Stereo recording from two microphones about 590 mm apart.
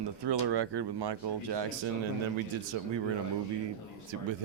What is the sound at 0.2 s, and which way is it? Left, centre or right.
Speech, right.